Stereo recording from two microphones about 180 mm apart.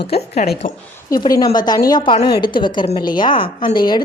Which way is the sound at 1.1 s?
20° left (ahead or behind).